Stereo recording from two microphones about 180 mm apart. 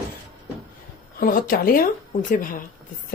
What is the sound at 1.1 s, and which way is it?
Speech, 55° left (ahead or behind).